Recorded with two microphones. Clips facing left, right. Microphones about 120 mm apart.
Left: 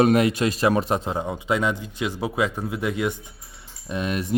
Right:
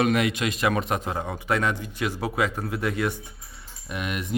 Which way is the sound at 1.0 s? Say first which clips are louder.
Left 2 dB; 15° left (ahead or behind).